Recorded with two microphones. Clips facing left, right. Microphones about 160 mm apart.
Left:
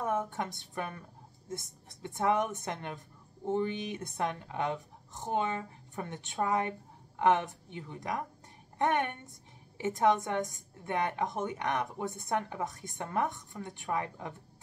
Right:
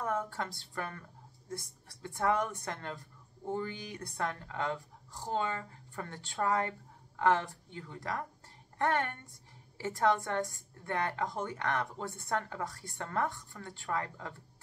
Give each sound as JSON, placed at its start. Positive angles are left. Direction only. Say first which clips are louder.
{"t": 0.0, "sound": "a woman's voice", "louder": "left 2 dB", "side_deg": 20}